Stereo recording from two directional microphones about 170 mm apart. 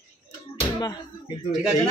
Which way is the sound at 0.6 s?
25° left (ahead or behind).